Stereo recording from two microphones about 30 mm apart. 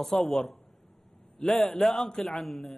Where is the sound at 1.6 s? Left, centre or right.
Centre.